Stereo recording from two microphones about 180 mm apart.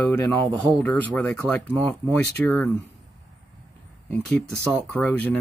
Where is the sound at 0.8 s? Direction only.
10° left (ahead or behind).